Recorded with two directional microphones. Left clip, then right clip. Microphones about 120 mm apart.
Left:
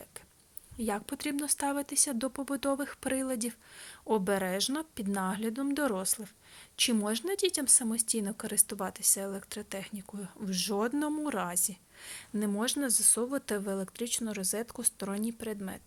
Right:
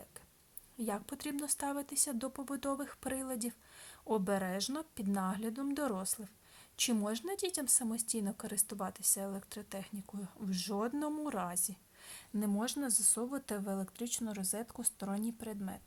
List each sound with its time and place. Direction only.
0.8 s a woman's voice: 15° left (ahead or behind)